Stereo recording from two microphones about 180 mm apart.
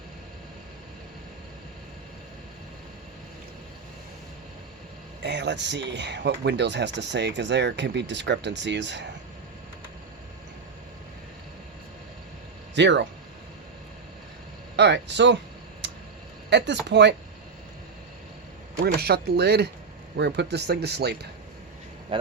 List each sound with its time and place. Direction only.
5.2 s speech: 75° right (ahead or behind)
12.7 s speech: 75° right (ahead or behind)
14.8 s speech: 70° right (ahead or behind)
15.8 s tick: 75° right (ahead or behind)
16.5 s speech: 75° right (ahead or behind)
18.9 s speech: 60° right (ahead or behind)
22.1 s speech: 30° right (ahead or behind)